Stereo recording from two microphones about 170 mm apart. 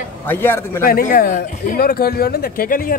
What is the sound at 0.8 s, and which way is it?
Speech, 60° left (ahead or behind).